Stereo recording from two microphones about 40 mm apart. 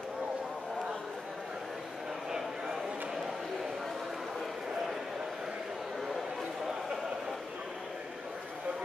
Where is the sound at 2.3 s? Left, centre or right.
Centre.